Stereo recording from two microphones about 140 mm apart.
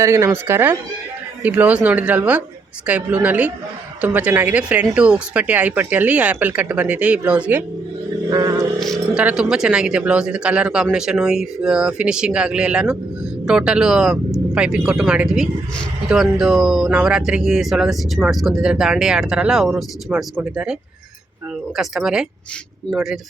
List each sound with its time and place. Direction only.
0.0 s speech: 20° right (ahead or behind)
8.3 s vehicle: 25° right (ahead or behind)
9.1 s speech: 5° right (ahead or behind)
21.8 s speech: 5° right (ahead or behind)